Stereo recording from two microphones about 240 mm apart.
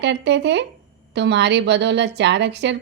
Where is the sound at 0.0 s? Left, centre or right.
Right.